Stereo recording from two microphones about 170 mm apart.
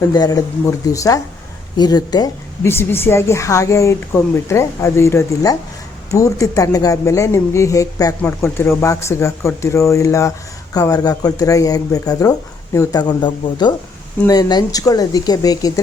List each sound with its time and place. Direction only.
0.1 s a woman's voice: 20° left (ahead or behind)